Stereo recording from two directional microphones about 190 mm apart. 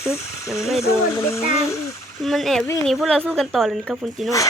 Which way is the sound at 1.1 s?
15° left (ahead or behind).